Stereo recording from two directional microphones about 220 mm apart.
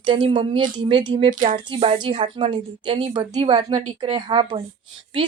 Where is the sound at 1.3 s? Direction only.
35° right (ahead or behind).